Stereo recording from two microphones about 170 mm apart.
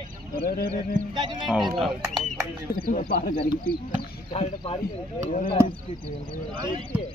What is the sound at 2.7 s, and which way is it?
Speech, 55° left (ahead or behind).